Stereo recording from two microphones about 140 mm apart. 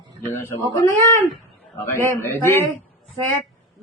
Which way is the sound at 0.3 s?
20° left (ahead or behind).